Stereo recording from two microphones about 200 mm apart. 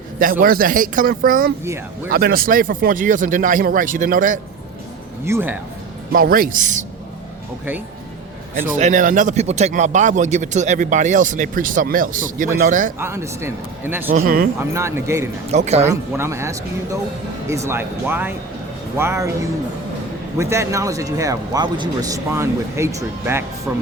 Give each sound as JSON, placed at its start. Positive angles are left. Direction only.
{"t": 0.2, "sound": "speech", "side_deg": -45}
{"t": 5.2, "sound": "a man's voice", "side_deg": -10}
{"t": 6.1, "sound": "speech", "side_deg": -45}
{"t": 8.5, "sound": "speech", "side_deg": -40}
{"t": 13.0, "sound": "a man's voice", "side_deg": -15}
{"t": 14.3, "sound": "speech", "side_deg": -45}
{"t": 14.6, "sound": "a man's voice", "side_deg": -15}
{"t": 15.5, "sound": "speech", "side_deg": -35}
{"t": 16.1, "sound": "a man's voice", "side_deg": -15}
{"t": 20.4, "sound": "a man's voice", "side_deg": -15}